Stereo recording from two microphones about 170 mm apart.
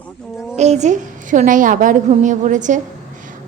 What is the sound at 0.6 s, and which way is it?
A woman's voice, 40° right (ahead or behind).